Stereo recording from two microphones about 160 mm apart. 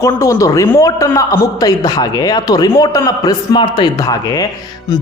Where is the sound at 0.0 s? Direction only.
20° left (ahead or behind).